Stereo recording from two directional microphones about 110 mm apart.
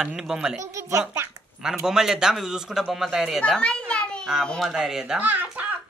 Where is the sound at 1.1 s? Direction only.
25° right (ahead or behind).